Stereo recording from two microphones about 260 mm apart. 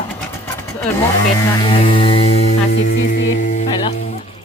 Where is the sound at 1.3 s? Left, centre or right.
Centre.